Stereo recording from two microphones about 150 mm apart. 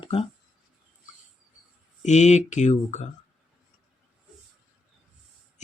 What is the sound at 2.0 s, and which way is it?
Speech, 50° left (ahead or behind).